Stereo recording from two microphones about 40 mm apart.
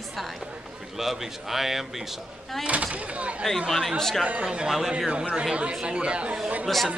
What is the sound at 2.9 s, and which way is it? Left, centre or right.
Speech, right.